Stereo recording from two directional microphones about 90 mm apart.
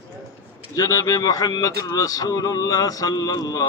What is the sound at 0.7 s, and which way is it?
Speech, 40° left (ahead or behind).